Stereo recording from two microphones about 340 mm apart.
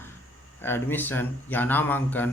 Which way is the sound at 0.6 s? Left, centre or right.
Centre.